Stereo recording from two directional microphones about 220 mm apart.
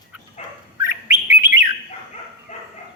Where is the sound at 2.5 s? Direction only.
30° left (ahead or behind).